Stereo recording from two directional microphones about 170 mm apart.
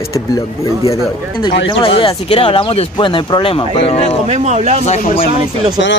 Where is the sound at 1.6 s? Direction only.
35° left (ahead or behind).